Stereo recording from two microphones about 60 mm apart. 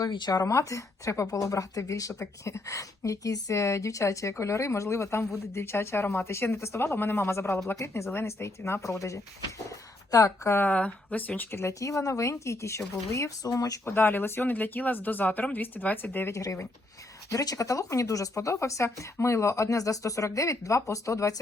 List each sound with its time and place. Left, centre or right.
0.0 s speech: left
0.5 s a woman's voice: left
9.6 s speech: left
10.7 s speech: left
11.5 s a woman's voice: left
13.8 s speech: left
16.3 s a woman's voice: left
17.2 s a woman's voice: left